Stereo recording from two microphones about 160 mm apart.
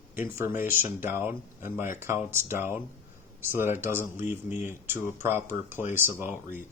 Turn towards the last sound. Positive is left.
turn(degrees=-15)  # may be behind; listen again after turning